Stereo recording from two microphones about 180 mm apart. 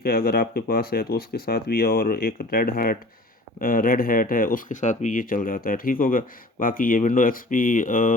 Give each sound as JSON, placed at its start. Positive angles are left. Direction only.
{"t": 0.0, "sound": "speech", "side_deg": 55}